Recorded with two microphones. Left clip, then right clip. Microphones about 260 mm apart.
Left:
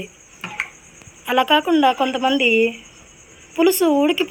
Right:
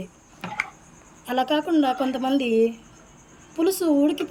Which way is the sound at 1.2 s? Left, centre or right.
Centre.